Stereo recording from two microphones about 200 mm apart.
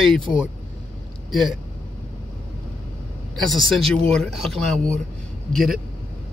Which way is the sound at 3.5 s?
Centre (ahead or behind).